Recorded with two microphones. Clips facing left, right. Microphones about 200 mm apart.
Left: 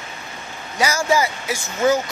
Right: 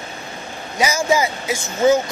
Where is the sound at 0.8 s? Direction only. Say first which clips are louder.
Right 1 dB; 20° right (ahead or behind).